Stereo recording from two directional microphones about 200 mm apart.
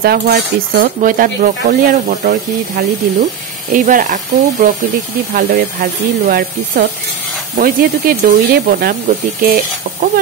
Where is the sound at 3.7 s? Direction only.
40° right (ahead or behind).